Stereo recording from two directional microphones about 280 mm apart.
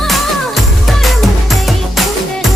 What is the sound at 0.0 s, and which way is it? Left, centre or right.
Music, centre.